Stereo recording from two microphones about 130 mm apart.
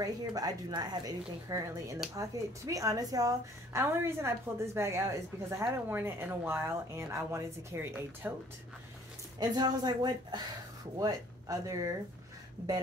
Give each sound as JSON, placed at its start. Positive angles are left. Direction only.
{"t": 0.0, "sound": "a woman's voice", "side_deg": -30}
{"t": 9.4, "sound": "a woman's voice", "side_deg": -30}